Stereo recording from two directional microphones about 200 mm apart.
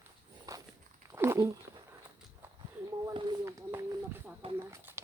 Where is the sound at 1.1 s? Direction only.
10° right (ahead or behind).